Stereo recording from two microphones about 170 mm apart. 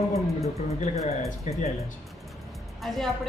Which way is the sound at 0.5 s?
40° left (ahead or behind).